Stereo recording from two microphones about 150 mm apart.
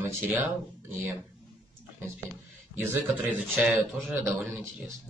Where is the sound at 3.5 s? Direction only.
Centre (ahead or behind).